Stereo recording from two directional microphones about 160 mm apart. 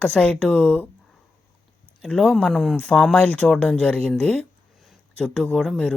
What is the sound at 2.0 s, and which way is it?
Speech, 5° left (ahead or behind).